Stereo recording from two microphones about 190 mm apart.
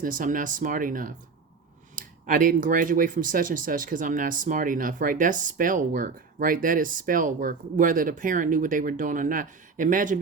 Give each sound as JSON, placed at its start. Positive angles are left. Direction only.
{"t": 0.0, "sound": "speech", "side_deg": -45}